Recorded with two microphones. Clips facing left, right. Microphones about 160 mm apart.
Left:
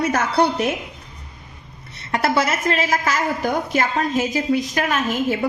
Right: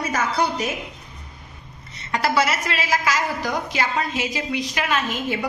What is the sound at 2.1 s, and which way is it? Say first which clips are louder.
A woman's voice: left 1 dB; 50° left (ahead or behind).